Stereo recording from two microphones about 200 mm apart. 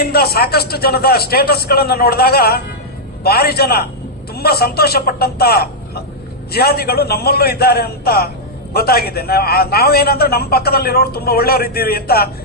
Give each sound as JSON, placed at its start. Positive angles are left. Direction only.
{"t": 0.0, "sound": "a man's voice", "side_deg": 50}